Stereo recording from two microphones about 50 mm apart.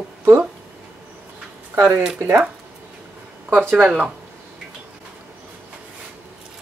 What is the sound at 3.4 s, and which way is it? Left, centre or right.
Speech, right.